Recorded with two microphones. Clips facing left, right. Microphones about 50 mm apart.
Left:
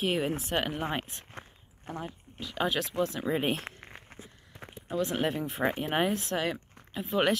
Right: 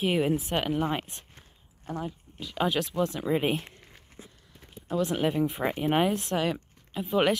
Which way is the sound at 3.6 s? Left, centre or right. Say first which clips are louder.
Left 4 dB; left.